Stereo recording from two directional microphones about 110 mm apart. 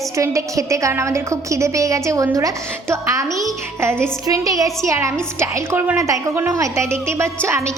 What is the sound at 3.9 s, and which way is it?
Speech, 5° left (ahead or behind).